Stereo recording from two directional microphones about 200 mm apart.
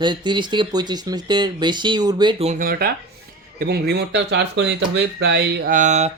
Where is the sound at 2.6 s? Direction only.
50° right (ahead or behind).